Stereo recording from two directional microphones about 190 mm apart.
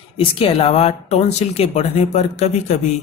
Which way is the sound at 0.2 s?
30° left (ahead or behind).